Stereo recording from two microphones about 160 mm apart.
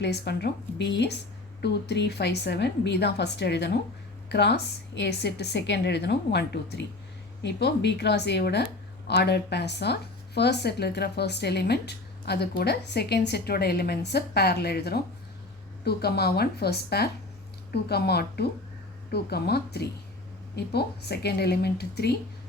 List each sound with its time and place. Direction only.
0.0 s a woman's voice: 90° left